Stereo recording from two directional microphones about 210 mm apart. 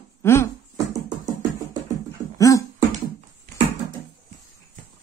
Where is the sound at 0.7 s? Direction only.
15° right (ahead or behind).